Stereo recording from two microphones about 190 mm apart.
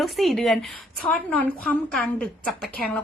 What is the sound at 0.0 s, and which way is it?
A woman's voice, centre (ahead or behind).